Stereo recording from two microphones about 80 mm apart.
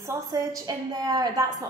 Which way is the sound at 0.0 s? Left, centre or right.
Right.